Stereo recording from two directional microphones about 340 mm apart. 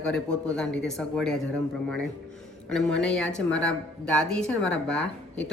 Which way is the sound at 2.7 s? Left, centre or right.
Centre.